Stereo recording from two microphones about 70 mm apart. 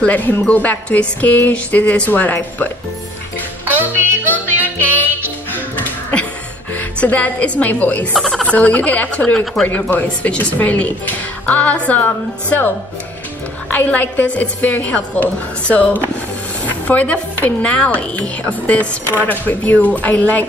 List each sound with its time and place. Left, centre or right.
0.0 s speech: left
3.6 s music: right
6.7 s a woman's voice: left
8.1 s a sound: centre
8.5 s speech: left